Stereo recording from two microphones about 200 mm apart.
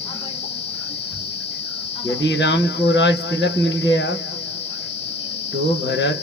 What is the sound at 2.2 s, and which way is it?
Speech, 65° left (ahead or behind).